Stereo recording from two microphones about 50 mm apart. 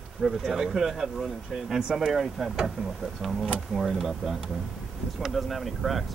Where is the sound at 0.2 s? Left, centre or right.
Centre.